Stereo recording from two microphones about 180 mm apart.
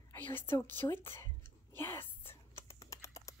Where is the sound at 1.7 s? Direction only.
15° left (ahead or behind).